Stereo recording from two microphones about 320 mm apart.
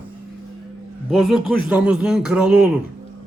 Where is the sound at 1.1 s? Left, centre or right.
Centre.